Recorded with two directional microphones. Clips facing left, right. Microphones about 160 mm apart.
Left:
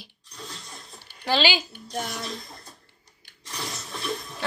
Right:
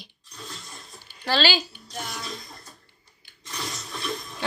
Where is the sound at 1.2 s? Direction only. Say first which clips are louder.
Even; 15° left (ahead or behind).